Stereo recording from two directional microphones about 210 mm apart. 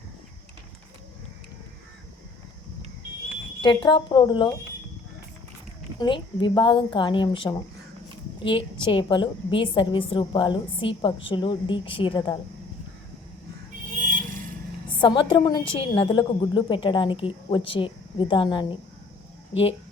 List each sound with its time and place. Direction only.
3.6 s a woman's voice: 20° left (ahead or behind)
6.0 s a woman's voice: 20° left (ahead or behind)
14.1 s vehicle: 40° right (ahead or behind)
15.0 s a woman's voice: 25° left (ahead or behind)